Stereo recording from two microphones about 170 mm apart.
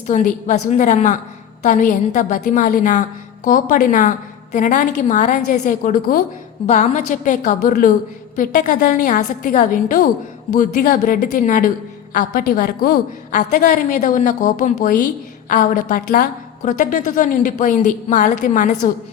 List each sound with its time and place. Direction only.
0.1 s a woman's voice: 45° left (ahead or behind)